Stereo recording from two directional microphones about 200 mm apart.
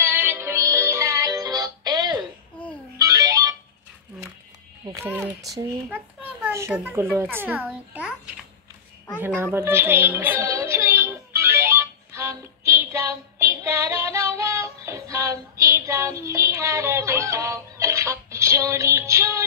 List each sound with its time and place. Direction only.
0.0 s music: 10° right (ahead or behind)
4.8 s speech: 15° right (ahead or behind)
5.4 s a child's voice: centre (ahead or behind)
5.9 s a child's voice: 10° right (ahead or behind)
7.9 s a sound: 5° right (ahead or behind)
9.2 s music: 10° right (ahead or behind)